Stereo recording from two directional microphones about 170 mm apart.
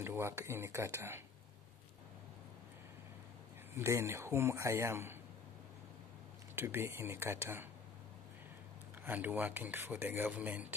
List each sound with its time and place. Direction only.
0.0 s speech: 15° right (ahead or behind)
3.7 s speech: 15° right (ahead or behind)
6.5 s speech: 15° right (ahead or behind)
9.0 s speech: 10° right (ahead or behind)